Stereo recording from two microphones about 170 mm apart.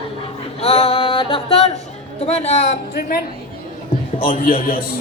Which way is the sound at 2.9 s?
60° left (ahead or behind).